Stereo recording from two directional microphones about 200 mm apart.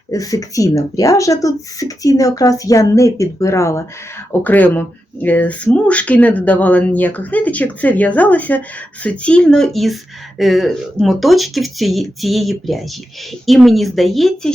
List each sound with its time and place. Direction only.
0.1 s speech: 15° left (ahead or behind); by 14.5 s centre (ahead or behind)